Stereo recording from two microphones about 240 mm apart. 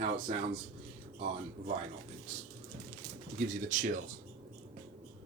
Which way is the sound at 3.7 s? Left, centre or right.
Right.